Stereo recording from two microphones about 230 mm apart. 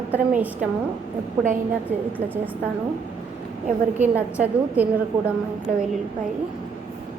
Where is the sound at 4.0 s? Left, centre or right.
Centre.